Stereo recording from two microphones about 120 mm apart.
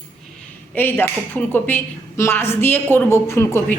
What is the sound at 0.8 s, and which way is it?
A woman's voice, 15° left (ahead or behind).